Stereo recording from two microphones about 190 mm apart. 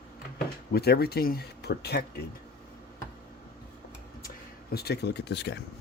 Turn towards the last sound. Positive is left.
turn(degrees=60)  # may be behind; listen again after turning